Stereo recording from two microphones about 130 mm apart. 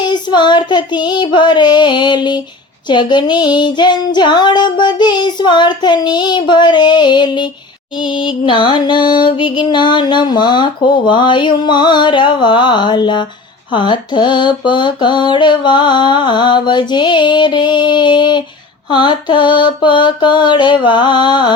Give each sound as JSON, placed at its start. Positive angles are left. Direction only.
{"t": 0.0, "sound": "music", "side_deg": 35}